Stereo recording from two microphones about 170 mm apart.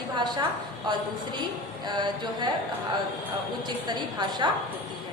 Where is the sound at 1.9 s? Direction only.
25° right (ahead or behind).